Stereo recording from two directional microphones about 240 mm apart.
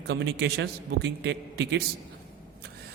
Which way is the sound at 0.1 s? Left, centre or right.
Right.